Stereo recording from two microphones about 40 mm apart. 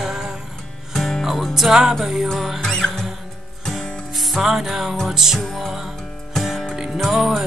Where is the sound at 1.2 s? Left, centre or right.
Centre.